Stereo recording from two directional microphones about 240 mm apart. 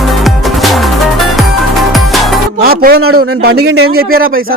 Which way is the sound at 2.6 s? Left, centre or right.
Right.